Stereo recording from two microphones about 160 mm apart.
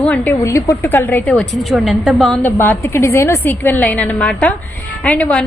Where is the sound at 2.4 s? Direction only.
15° left (ahead or behind).